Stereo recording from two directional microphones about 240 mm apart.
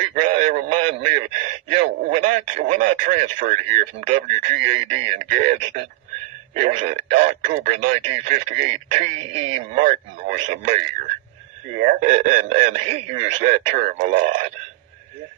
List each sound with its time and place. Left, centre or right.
0.1 s a man's voice: right
11.8 s speech: right